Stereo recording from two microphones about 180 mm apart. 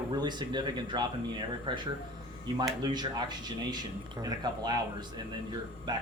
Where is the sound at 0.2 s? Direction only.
25° right (ahead or behind).